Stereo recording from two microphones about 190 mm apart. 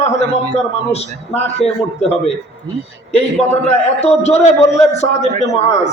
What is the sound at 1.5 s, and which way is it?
Speech, 35° left (ahead or behind).